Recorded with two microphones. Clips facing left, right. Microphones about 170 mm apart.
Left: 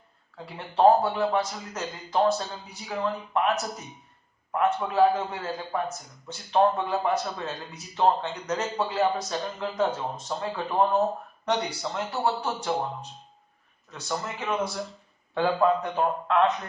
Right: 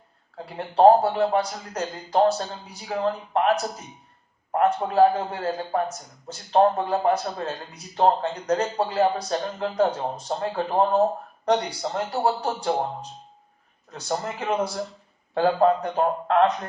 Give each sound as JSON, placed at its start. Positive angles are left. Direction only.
{"t": 0.3, "sound": "speech", "side_deg": -40}
{"t": 13.9, "sound": "speech", "side_deg": -40}